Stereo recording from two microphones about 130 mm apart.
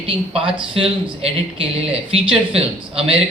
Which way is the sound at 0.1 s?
40° right (ahead or behind).